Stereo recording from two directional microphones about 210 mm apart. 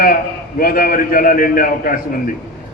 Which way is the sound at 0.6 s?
45° left (ahead or behind).